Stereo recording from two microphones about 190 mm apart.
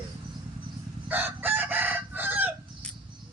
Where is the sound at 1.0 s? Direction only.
10° right (ahead or behind).